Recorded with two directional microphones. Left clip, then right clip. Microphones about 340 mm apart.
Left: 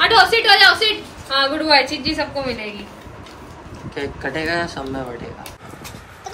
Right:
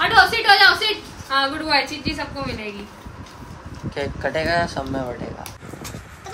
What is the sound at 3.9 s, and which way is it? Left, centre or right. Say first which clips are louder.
Speech: right 1 dB; right.